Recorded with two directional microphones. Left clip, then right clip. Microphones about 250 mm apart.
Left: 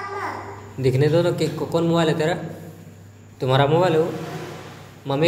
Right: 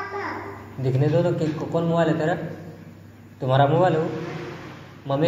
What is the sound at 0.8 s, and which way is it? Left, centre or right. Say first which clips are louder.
A man's voice: left 4 dB; left.